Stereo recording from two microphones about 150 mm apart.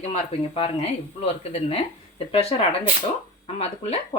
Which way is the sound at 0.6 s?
40° left (ahead or behind).